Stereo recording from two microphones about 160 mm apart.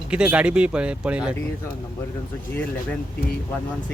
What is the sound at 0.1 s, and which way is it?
Speech, 5° right (ahead or behind).